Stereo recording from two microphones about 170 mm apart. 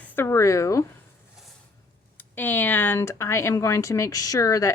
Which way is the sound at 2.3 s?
10° left (ahead or behind).